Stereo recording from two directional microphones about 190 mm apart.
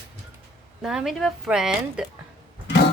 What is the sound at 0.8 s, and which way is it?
A woman's voice, centre (ahead or behind).